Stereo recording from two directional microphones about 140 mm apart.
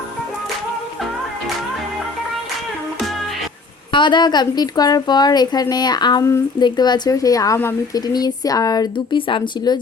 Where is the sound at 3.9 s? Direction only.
35° left (ahead or behind).